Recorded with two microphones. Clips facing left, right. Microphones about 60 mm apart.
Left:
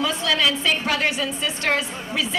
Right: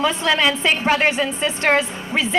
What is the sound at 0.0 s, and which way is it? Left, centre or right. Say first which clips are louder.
A woman's voice: right 4 dB; right.